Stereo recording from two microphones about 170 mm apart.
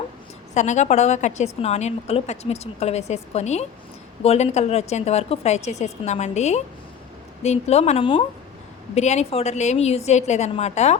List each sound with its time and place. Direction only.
0.5 s a woman's voice: 45° left (ahead or behind)